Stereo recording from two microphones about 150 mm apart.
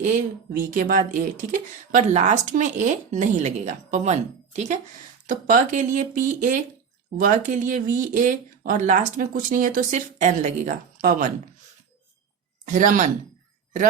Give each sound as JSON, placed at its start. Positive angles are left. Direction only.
{"t": 0.7, "sound": "speech", "side_deg": -65}
{"t": 12.6, "sound": "speech", "side_deg": -60}